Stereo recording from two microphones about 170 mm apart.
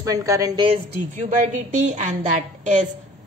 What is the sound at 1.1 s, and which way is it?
A woman's voice, 45° right (ahead or behind).